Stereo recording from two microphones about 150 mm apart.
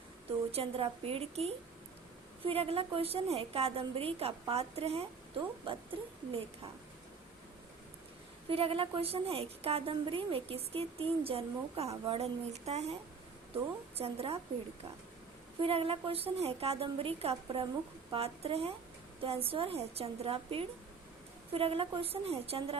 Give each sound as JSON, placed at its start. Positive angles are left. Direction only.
{"t": 0.5, "sound": "a woman's voice", "side_deg": -40}
{"t": 8.4, "sound": "a woman's voice", "side_deg": -40}
{"t": 14.0, "sound": "a woman's voice", "side_deg": -40}
{"t": 15.6, "sound": "a woman's voice", "side_deg": -40}